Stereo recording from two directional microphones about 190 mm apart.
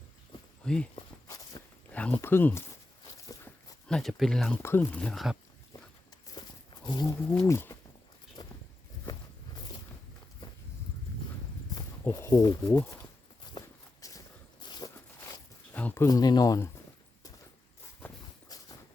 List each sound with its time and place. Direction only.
0.6 s speech: 5° left (ahead or behind)
0.9 s walk: 20° left (ahead or behind)
1.9 s speech: 5° left (ahead or behind)
3.8 s speech: centre (ahead or behind)
6.4 s a sound: 20° left (ahead or behind)
6.8 s speech: 20° left (ahead or behind)
8.4 s walk: 20° left (ahead or behind)
11.7 s speech: 15° left (ahead or behind)
13.5 s walk: 20° left (ahead or behind)
16.0 s speech: 20° left (ahead or behind)
18.0 s walk: 20° left (ahead or behind)